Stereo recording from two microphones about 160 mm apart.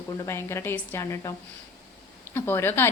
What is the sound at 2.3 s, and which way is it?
Speech, 15° left (ahead or behind).